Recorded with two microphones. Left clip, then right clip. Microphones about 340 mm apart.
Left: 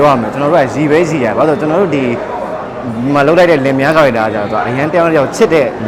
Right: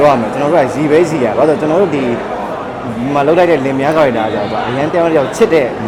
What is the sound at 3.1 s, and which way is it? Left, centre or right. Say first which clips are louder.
Speech: left 2 dB; centre.